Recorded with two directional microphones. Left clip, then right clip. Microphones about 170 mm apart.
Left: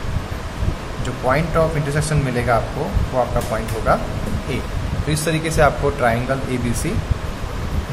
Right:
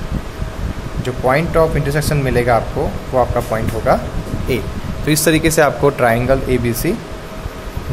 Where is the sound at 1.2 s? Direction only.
35° right (ahead or behind).